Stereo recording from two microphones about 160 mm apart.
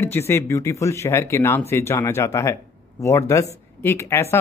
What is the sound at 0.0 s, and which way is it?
A man's voice, 15° left (ahead or behind).